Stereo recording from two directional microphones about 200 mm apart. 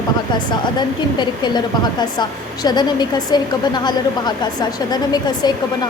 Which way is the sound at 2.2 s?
20° left (ahead or behind).